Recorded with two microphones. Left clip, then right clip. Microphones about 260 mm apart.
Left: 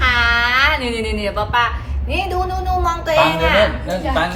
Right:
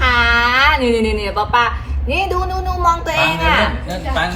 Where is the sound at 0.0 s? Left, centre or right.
Centre.